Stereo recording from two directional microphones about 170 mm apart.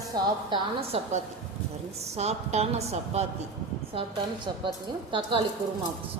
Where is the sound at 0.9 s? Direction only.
35° right (ahead or behind).